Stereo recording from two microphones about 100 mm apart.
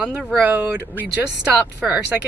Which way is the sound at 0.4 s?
15° right (ahead or behind).